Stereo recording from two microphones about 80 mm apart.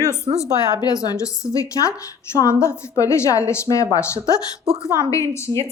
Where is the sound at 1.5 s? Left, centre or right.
Left.